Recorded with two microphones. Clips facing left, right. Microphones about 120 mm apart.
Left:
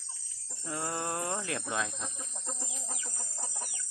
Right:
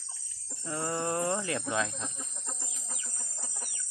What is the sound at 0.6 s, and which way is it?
Speech, centre (ahead or behind).